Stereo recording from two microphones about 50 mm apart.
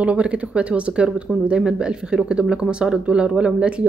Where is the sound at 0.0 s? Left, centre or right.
Right.